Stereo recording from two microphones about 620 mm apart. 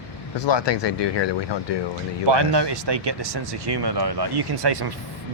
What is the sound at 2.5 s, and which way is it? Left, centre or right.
Speech, right.